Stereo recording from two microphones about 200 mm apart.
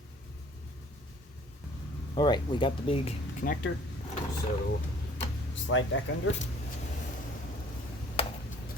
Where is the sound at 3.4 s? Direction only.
50° left (ahead or behind).